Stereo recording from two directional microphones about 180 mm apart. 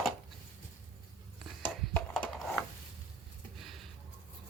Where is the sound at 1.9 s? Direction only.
5° left (ahead or behind).